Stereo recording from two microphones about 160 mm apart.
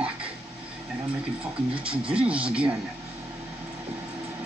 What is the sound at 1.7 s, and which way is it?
Speech, 5° right (ahead or behind).